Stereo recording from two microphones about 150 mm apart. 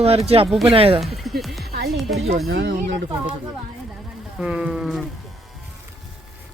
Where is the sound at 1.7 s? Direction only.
90° right.